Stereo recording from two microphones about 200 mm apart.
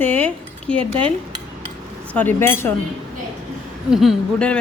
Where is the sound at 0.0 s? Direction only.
10° left (ahead or behind).